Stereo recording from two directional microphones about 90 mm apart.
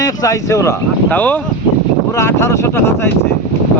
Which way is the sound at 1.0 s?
20° left (ahead or behind).